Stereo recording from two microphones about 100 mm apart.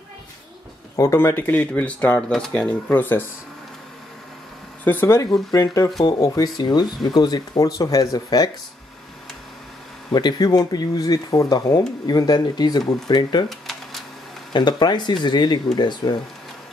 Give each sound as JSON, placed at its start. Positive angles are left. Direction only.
{"t": 0.9, "sound": "speech", "side_deg": 25}
{"t": 2.3, "sound": "speech", "side_deg": 5}
{"t": 2.7, "sound": "speech", "side_deg": 20}
{"t": 5.0, "sound": "speech", "side_deg": 30}
{"t": 10.1, "sound": "speech", "side_deg": 45}
{"t": 13.5, "sound": "a sound", "side_deg": 0}
{"t": 14.5, "sound": "speech", "side_deg": 45}